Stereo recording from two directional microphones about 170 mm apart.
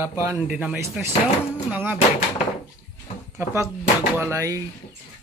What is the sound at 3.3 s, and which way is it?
A man's voice, 15° right (ahead or behind).